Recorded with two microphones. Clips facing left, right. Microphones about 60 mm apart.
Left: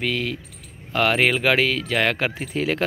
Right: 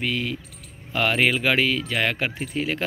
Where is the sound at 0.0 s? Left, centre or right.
Left.